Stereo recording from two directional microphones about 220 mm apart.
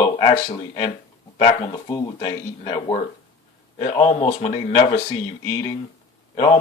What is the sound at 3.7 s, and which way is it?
Speech, 35° left (ahead or behind).